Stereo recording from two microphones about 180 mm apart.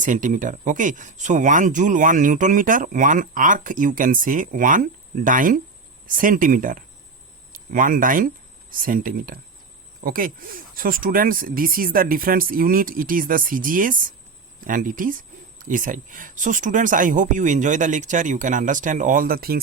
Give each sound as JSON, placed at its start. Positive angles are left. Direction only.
{"t": 0.0, "sound": "speech", "side_deg": -45}